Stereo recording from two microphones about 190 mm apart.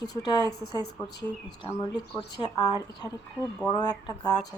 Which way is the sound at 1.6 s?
20° left (ahead or behind).